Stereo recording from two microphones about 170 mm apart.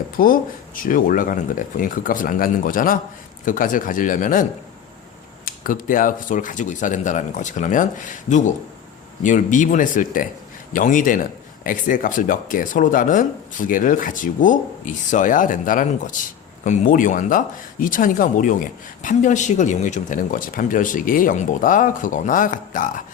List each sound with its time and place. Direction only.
0.2 s speech: 55° left (ahead or behind)
5.5 s speech: 55° left (ahead or behind)